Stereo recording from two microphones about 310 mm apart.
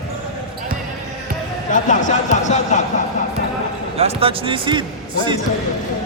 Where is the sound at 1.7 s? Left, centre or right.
Left.